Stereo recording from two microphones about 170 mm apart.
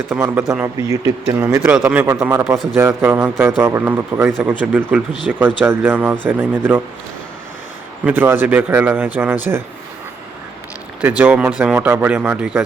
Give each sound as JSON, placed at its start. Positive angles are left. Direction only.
{"t": 0.1, "sound": "speech", "side_deg": -15}
{"t": 8.0, "sound": "speech", "side_deg": -10}
{"t": 11.2, "sound": "speech", "side_deg": -10}